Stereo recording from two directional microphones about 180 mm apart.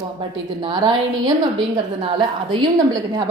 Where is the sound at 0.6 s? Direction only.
25° right (ahead or behind).